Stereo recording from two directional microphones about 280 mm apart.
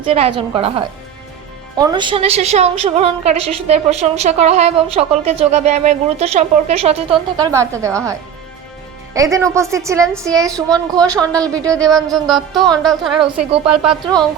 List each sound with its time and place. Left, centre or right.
0.1 s a woman's voice: centre
11.2 s a woman's voice: centre